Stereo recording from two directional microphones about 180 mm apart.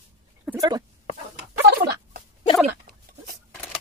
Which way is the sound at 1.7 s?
55° right (ahead or behind).